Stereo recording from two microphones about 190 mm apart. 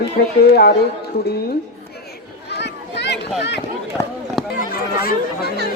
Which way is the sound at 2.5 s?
60° left (ahead or behind).